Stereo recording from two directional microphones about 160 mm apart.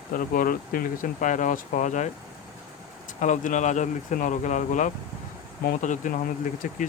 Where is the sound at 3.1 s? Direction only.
50° left (ahead or behind).